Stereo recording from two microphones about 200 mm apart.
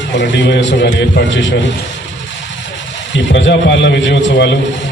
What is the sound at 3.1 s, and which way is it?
A man's voice, 65° left (ahead or behind).